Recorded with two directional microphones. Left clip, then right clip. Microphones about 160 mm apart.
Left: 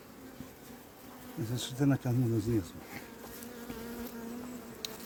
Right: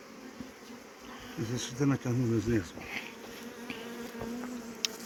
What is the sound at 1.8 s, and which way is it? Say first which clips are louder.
Speech: even; 75° left (ahead or behind).